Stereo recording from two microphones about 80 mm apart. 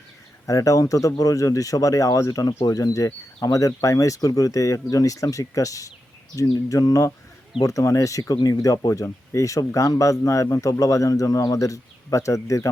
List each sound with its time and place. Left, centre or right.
0.4 s speech: left